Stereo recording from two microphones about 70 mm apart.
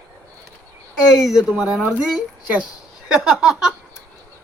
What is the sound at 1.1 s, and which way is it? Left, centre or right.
Speech, centre.